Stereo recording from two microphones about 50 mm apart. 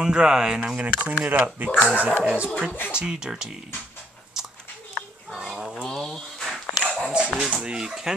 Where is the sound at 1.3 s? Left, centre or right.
Right.